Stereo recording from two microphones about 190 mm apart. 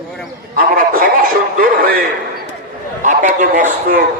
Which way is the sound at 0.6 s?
50° right (ahead or behind).